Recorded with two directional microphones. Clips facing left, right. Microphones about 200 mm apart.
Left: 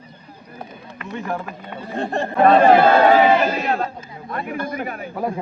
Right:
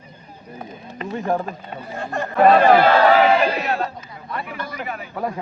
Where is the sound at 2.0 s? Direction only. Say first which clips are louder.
Even; 30° left (ahead or behind).